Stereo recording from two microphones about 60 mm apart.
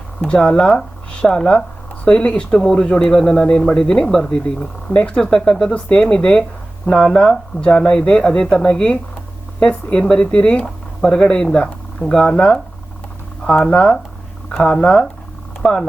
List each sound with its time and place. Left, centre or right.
0.3 s speech: centre